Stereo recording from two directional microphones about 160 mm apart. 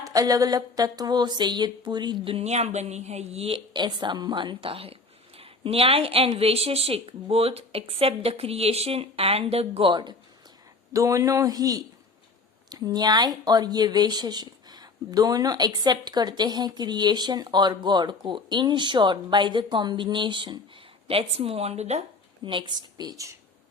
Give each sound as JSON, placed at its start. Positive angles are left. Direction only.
{"t": 0.0, "sound": "a woman's voice", "side_deg": -20}
{"t": 22.4, "sound": "speech", "side_deg": -30}